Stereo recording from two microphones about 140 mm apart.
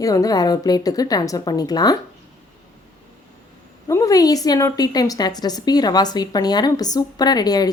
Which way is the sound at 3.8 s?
25° left (ahead or behind).